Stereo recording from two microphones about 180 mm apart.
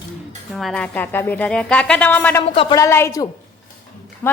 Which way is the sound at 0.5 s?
5° left (ahead or behind).